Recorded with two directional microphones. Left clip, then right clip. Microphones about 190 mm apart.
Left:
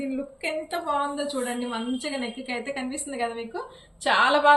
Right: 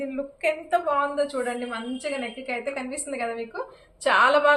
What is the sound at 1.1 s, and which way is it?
A woman's voice, 25° right (ahead or behind).